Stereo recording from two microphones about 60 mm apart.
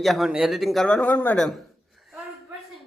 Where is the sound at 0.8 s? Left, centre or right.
Centre.